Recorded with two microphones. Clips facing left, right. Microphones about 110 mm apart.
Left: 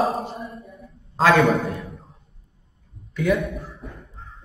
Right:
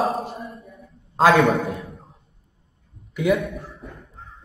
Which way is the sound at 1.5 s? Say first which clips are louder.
Even; centre (ahead or behind).